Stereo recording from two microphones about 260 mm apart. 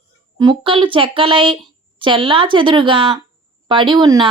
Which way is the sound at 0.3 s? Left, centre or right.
Centre.